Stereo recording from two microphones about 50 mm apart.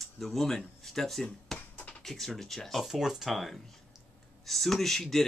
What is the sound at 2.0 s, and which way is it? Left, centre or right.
Speech, centre.